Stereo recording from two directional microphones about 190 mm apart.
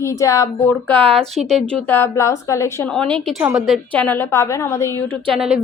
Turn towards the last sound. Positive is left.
turn(degrees=-5)  # may be behind; listen again after turning